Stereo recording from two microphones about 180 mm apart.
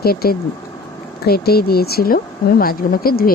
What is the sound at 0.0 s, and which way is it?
Speech, 60° left (ahead or behind).